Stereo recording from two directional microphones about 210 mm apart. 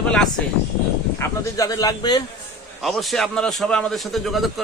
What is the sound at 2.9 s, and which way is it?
A man's voice, centre (ahead or behind).